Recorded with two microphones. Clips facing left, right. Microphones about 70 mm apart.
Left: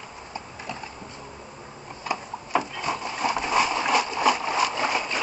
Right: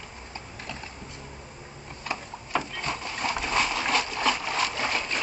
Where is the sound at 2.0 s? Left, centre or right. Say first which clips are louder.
Left 4 dB; centre.